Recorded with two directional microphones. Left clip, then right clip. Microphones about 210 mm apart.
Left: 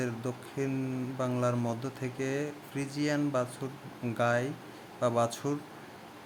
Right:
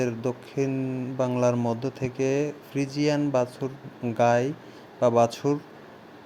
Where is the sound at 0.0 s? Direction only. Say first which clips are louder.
Right 8 dB; 20° right (ahead or behind).